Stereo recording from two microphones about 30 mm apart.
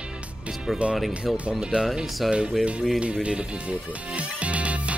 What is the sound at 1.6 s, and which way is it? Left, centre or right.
Speech, right.